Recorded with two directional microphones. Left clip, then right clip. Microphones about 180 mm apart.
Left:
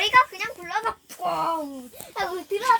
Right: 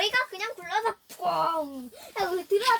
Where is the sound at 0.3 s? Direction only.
5° right (ahead or behind).